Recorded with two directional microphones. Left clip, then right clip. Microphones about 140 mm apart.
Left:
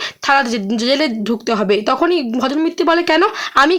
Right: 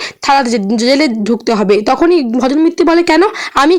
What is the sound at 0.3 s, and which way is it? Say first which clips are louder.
Speech: right 4 dB; 30° right (ahead or behind).